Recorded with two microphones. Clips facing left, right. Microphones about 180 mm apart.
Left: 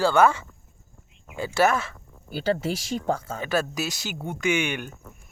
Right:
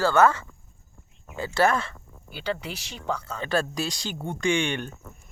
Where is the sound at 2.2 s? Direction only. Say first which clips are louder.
Left 6 dB; 40° left (ahead or behind).